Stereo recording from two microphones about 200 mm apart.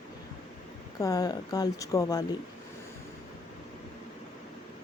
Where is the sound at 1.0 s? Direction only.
20° left (ahead or behind).